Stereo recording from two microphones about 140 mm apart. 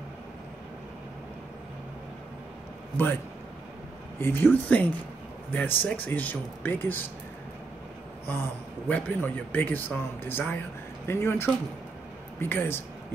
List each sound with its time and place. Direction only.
4.2 s a man's voice: 15° left (ahead or behind)
8.8 s a man's voice: 10° left (ahead or behind)